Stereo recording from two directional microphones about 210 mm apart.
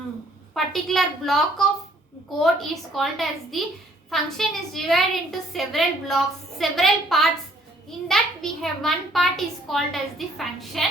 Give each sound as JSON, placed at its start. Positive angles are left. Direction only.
{"t": 0.5, "sound": "a woman's voice", "side_deg": 0}